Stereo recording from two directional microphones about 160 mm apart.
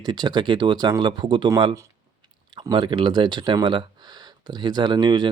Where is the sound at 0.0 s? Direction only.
25° right (ahead or behind).